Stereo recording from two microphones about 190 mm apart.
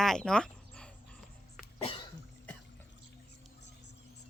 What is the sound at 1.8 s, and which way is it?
Cough, 30° left (ahead or behind).